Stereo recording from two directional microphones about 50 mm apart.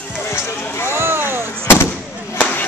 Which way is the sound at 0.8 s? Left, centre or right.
Right.